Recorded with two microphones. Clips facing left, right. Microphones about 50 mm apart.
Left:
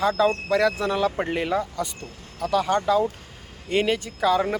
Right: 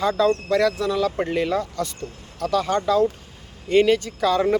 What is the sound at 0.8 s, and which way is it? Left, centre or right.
Speech, left.